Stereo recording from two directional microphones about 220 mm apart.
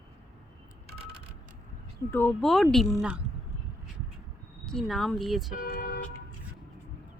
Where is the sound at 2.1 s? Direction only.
10° left (ahead or behind).